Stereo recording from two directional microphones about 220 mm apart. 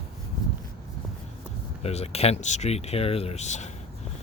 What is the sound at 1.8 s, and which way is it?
Speech, 30° left (ahead or behind).